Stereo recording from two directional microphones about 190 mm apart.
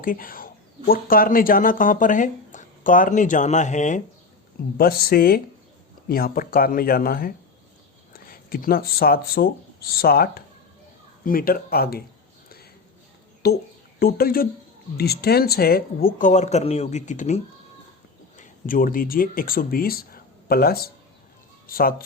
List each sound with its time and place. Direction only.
0.0 s speech: 50° left (ahead or behind)
4.8 s speech: 50° left (ahead or behind)
13.4 s speech: 55° left (ahead or behind)